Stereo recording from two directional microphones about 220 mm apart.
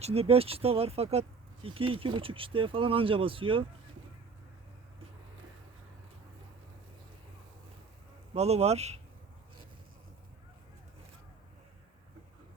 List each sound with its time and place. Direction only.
0.0 s speech: 25° right (ahead or behind)
8.3 s speech: 30° right (ahead or behind)